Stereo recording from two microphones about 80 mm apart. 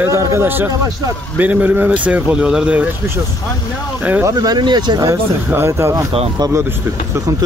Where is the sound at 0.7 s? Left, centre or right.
Right.